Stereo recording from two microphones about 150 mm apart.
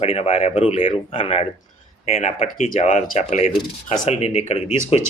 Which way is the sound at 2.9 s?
45° left (ahead or behind).